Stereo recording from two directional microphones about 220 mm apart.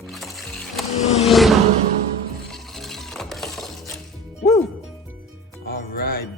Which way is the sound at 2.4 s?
Centre (ahead or behind).